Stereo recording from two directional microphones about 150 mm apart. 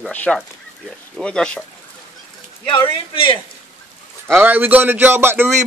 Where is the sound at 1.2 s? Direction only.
5° left (ahead or behind).